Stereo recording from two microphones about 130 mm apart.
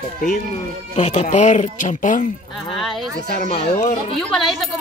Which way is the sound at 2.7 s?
Centre (ahead or behind).